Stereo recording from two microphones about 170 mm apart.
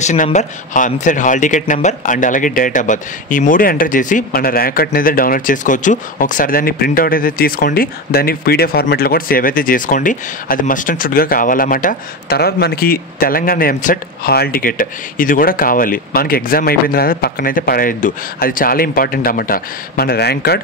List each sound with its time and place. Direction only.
0.0 s a man's voice: 45° left (ahead or behind); by 20.6 s 75° left (ahead or behind)